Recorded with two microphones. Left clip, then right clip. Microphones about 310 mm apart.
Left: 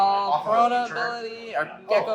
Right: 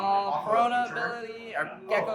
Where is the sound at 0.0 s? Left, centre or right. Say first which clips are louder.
Left 5 dB; centre.